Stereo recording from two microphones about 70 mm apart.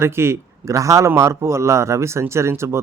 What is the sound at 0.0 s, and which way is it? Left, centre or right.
A man's voice, right.